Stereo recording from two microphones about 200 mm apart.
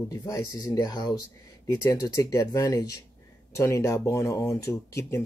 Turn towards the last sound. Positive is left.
turn(degrees=15)  # may be behind; listen again after turning